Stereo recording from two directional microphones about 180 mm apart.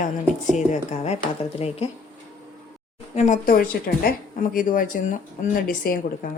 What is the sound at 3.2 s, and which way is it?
Speech, 45° left (ahead or behind).